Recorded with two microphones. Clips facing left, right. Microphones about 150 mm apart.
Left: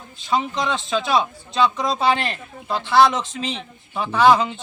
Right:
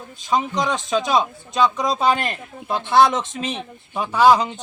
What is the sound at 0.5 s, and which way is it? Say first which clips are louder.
Speech: right 2 dB; 15° right (ahead or behind).